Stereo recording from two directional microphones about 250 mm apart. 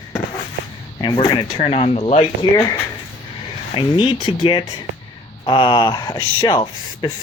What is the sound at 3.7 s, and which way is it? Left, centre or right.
Speech, centre.